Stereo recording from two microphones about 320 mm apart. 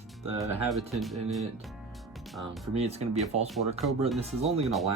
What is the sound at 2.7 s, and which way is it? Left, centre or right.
Speech, centre.